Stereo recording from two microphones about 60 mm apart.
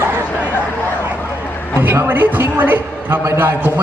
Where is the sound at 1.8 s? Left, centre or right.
Right.